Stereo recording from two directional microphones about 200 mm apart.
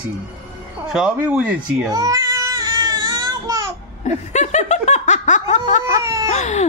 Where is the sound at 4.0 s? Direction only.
35° left (ahead or behind).